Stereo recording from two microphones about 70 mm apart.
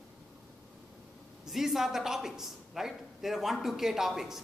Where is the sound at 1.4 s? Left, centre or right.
Centre.